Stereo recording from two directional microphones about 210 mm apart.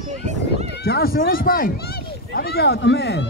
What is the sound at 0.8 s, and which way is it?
Speech, 45° left (ahead or behind).